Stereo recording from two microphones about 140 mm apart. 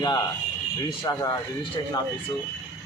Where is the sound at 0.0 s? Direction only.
30° left (ahead or behind).